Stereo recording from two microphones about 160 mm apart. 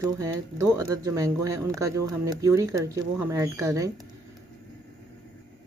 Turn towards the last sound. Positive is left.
turn(degrees=-20)  # may be behind; listen again after turning